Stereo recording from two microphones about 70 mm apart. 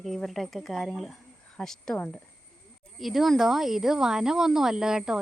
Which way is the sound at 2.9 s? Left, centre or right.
Centre.